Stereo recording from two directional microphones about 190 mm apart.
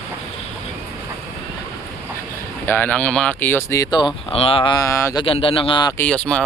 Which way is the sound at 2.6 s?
10° left (ahead or behind).